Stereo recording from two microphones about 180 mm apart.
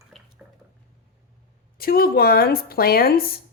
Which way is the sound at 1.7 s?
55° left (ahead or behind).